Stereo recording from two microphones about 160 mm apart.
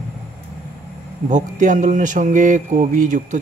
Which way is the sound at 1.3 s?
50° right (ahead or behind).